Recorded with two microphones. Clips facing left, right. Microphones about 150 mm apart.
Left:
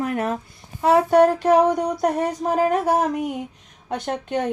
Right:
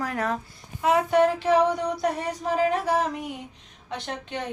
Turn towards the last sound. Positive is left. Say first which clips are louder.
# left 8 dB
turn(degrees=50)  # may be behind; listen again after turning